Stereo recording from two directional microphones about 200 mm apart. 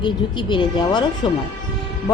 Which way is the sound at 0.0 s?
25° left (ahead or behind).